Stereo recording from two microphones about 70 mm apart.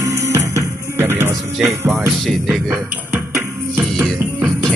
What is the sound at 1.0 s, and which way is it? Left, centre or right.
Music, right.